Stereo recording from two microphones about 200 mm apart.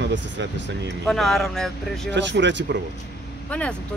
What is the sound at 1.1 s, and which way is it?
Speech, centre (ahead or behind).